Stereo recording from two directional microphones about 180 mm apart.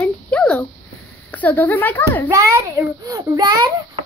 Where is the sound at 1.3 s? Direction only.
10° left (ahead or behind).